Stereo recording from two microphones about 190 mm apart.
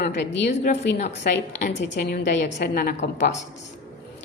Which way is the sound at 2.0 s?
55° left (ahead or behind).